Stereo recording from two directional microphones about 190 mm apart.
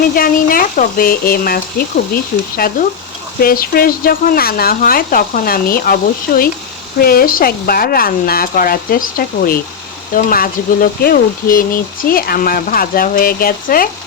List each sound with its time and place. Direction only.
0.2 s speech: 50° left (ahead or behind)